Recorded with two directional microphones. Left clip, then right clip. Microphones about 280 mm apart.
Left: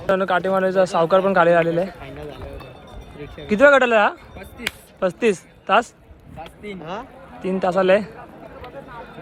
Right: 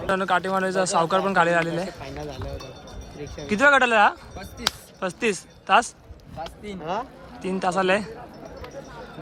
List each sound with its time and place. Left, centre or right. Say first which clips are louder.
0.1 s speech: left 4 dB; centre
2.1 s run: even; right
3.4 s speech: left 4 dB; centre
6.8 s speech: right 4 dB; right
7.4 s speech: left 5 dB; centre